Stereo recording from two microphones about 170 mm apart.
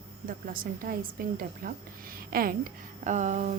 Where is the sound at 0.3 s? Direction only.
55° right (ahead or behind).